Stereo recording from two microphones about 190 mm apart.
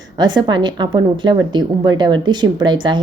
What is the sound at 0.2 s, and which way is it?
A woman's voice, 25° right (ahead or behind).